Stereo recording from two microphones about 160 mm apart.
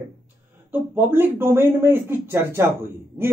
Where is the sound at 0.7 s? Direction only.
10° right (ahead or behind).